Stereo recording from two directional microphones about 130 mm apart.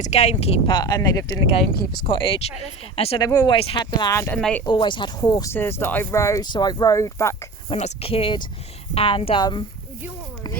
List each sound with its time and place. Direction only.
0.0 s speech: 60° left (ahead or behind)
0.7 s speech: 30° left (ahead or behind)
1.5 s speech: 35° left (ahead or behind)
3.2 s speech: 30° left (ahead or behind)
3.5 s speech: 45° left (ahead or behind)
3.9 s speech: 25° left (ahead or behind)
4.4 s speech: 5° left (ahead or behind)
4.6 s speech: 40° left (ahead or behind)
5.3 s speech: 25° left (ahead or behind)
5.5 s speech: 15° left (ahead or behind)
7.7 s speech: 50° left (ahead or behind); by 9.6 s 35° left (ahead or behind)